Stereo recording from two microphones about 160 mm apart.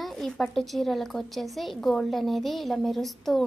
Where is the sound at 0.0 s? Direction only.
Centre (ahead or behind).